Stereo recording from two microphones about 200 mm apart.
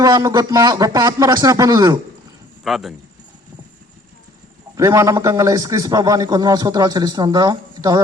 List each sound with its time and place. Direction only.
0.0 s a man's voice: 20° right (ahead or behind)
2.6 s speech: centre (ahead or behind)
4.7 s a man's voice: 15° right (ahead or behind)